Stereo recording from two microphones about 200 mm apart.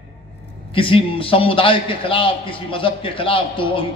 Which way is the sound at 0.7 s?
25° left (ahead or behind).